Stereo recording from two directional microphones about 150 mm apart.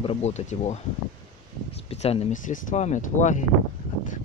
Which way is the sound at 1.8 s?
40° left (ahead or behind).